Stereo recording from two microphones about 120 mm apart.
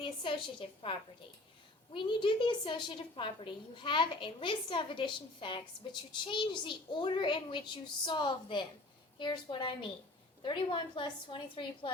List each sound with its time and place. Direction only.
0.0 s a woman's voice: 45° left (ahead or behind)